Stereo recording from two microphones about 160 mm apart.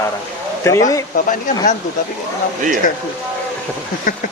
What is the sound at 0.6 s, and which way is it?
Speech, 20° left (ahead or behind).